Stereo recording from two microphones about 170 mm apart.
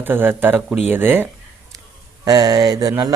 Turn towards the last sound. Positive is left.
turn(degrees=-20)  # may be behind; listen again after turning